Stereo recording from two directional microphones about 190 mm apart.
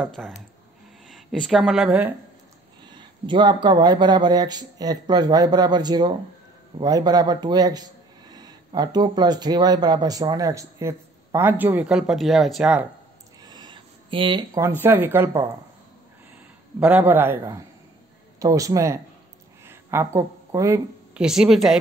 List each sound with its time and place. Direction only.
0.0 s a woman's voice: centre (ahead or behind)
2.8 s a sound: 25° right (ahead or behind)
3.6 s a man's voice: 20° right (ahead or behind); by 12.8 s 5° right (ahead or behind)
13.4 s speech: 20° right (ahead or behind)
16.8 s a man's voice: 10° right (ahead or behind)
19.6 s a sound: 10° right (ahead or behind)
21.2 s a woman's voice: 5° right (ahead or behind)